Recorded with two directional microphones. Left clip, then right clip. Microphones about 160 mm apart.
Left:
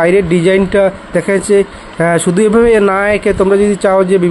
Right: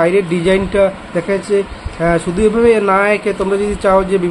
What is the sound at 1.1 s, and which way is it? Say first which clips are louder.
Speech: left 5 dB; 65° left (ahead or behind).